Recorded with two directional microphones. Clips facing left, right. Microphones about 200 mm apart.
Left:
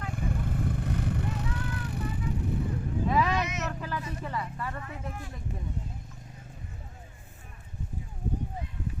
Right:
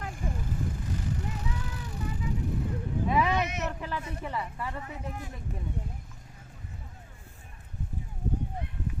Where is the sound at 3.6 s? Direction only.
20° right (ahead or behind).